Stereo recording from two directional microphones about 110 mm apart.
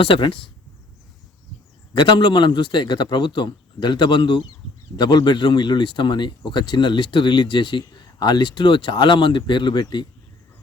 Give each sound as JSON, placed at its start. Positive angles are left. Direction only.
{"t": 0.0, "sound": "speech", "side_deg": 50}
{"t": 1.9, "sound": "speech", "side_deg": 45}